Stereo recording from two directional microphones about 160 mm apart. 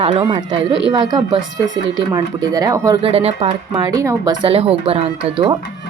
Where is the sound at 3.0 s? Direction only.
40° right (ahead or behind).